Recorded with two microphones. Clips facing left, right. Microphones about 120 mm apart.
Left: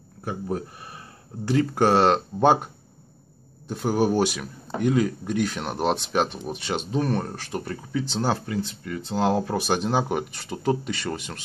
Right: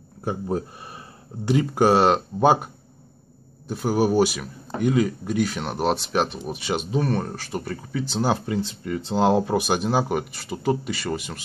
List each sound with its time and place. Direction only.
0.2 s speech: 25° right (ahead or behind)
1.4 s speech: 15° right (ahead or behind)
8.5 s speech: 25° right (ahead or behind); by 11.4 s 5° right (ahead or behind)